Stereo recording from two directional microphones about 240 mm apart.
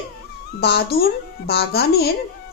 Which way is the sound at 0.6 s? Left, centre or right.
Left.